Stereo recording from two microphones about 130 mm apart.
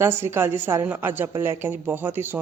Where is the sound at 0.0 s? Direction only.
20° right (ahead or behind).